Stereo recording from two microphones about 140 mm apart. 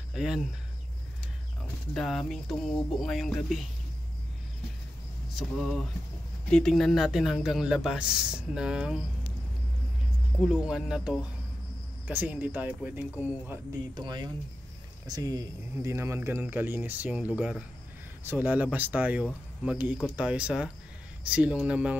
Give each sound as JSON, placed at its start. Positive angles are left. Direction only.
{"t": 0.1, "sound": "speech", "side_deg": -5}
{"t": 2.0, "sound": "speech", "side_deg": 0}
{"t": 5.3, "sound": "speech", "side_deg": 0}
{"t": 10.4, "sound": "speech", "side_deg": -5}
{"t": 13.9, "sound": "speech", "side_deg": -30}